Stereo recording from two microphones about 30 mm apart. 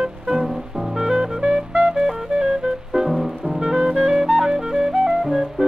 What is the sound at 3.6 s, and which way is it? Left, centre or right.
Music, right.